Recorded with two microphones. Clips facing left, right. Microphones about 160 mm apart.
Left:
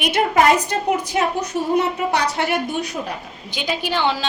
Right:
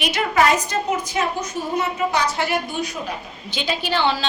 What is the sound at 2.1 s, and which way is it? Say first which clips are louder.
Speech: left 2 dB; 65° left (ahead or behind).